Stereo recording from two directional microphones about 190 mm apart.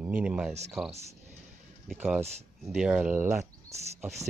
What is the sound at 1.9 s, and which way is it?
Speech, 10° right (ahead or behind).